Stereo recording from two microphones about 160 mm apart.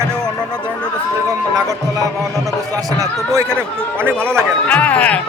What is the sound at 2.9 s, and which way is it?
Speech, 20° right (ahead or behind).